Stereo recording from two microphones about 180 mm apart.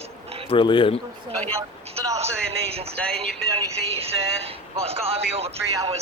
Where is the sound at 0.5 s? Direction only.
25° left (ahead or behind).